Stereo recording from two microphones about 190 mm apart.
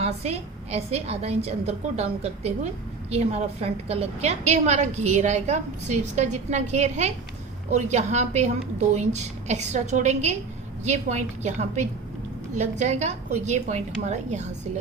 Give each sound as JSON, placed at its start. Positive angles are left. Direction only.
{"t": 0.0, "sound": "a woman's voice", "side_deg": -35}